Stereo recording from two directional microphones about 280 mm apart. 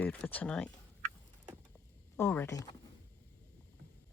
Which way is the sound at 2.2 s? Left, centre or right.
Centre.